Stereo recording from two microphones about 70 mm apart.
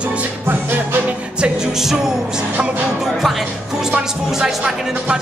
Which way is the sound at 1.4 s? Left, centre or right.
Centre.